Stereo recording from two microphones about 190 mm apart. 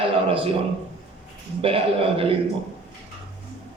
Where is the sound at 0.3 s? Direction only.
30° right (ahead or behind).